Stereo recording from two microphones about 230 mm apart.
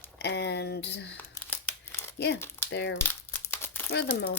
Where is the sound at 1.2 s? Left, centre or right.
Centre.